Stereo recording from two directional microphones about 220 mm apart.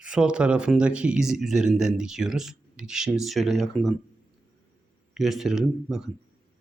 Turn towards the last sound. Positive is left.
turn(degrees=0)  # may be behind; listen again after turning